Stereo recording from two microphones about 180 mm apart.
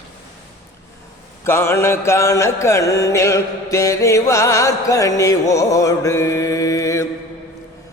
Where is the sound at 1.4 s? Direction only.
15° left (ahead or behind).